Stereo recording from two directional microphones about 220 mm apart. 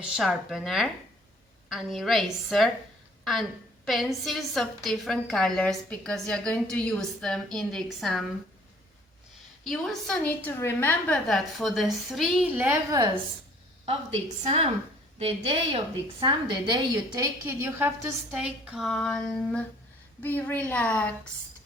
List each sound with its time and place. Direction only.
0.0 s a woman's voice: centre (ahead or behind)
3.8 s a woman's voice: centre (ahead or behind)
9.6 s a woman's voice: centre (ahead or behind)
14.4 s a woman's voice: 30° right (ahead or behind); by 21.1 s 5° left (ahead or behind)